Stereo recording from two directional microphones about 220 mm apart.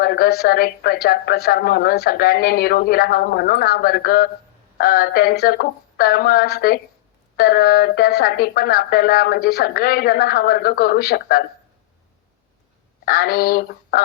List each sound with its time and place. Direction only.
0.0 s speech: 45° left (ahead or behind)
13.1 s speech: 45° left (ahead or behind)